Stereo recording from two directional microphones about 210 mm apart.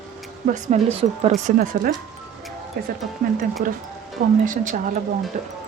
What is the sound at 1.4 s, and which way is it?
Speech, 40° right (ahead or behind).